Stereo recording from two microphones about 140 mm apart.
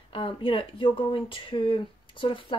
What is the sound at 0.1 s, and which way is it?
Speech, 40° left (ahead or behind).